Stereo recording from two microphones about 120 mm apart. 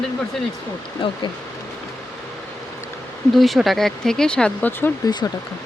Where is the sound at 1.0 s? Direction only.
45° left (ahead or behind).